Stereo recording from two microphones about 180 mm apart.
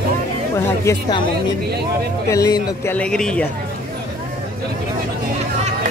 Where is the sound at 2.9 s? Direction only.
5° left (ahead or behind).